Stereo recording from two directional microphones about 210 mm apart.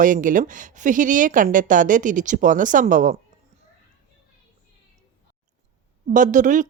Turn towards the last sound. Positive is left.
turn(degrees=-35)  # may be behind; listen again after turning